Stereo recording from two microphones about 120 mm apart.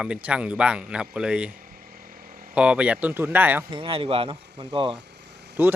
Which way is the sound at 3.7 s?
45° right (ahead or behind).